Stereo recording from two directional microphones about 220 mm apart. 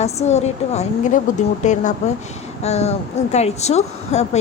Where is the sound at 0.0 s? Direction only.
30° left (ahead or behind).